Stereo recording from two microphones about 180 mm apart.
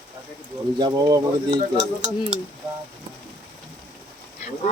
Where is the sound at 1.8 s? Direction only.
40° right (ahead or behind).